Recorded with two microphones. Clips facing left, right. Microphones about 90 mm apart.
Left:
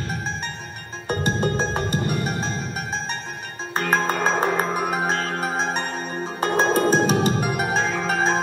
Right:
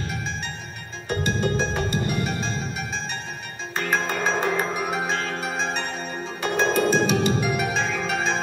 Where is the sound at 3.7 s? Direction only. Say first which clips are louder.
Left 3 dB; 45° left (ahead or behind).